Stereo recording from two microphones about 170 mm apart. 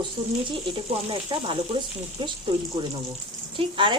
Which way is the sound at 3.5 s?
30° right (ahead or behind).